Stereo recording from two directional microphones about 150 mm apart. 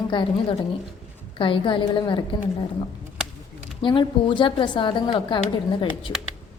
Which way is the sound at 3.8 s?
35° left (ahead or behind).